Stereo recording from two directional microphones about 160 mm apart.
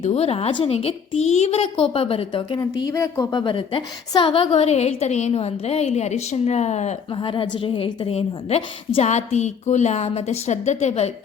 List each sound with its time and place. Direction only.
0.0 s a woman's voice: 40° left (ahead or behind)
7.1 s a woman's voice: 30° left (ahead or behind)